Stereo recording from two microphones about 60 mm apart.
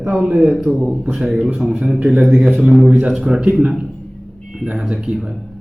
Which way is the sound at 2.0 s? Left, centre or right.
Right.